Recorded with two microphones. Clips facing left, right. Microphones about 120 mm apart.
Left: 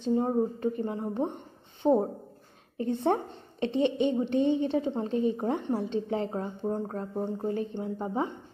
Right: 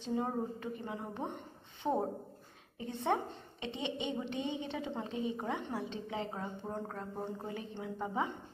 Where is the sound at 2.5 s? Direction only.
50° left (ahead or behind).